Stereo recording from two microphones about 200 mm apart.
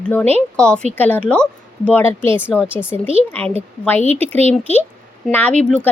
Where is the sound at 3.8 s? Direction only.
10° left (ahead or behind).